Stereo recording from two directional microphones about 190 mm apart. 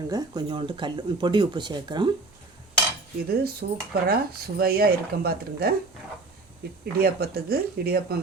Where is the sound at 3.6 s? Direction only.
55° right (ahead or behind).